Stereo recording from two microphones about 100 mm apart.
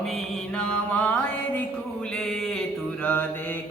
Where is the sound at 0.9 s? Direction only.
15° left (ahead or behind).